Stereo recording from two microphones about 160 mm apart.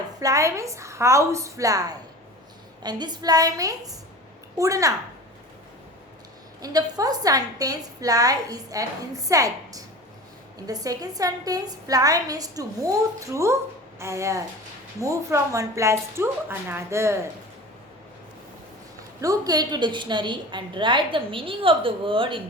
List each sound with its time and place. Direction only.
0.2 s a woman's voice: 20° right (ahead or behind)
6.6 s a woman's voice: 25° right (ahead or behind)
19.2 s a woman's voice: 20° right (ahead or behind)